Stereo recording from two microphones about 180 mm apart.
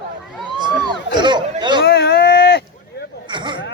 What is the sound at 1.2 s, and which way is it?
Chatter, 25° right (ahead or behind).